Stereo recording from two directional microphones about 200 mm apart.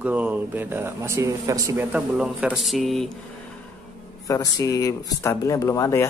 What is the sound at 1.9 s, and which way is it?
A man's voice, 5° right (ahead or behind).